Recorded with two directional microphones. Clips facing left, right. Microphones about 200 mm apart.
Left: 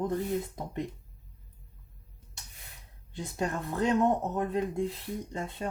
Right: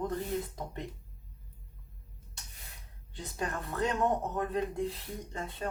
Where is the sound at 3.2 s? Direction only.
25° left (ahead or behind).